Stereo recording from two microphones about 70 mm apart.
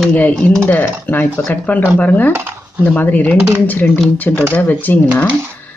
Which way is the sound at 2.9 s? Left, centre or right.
Left.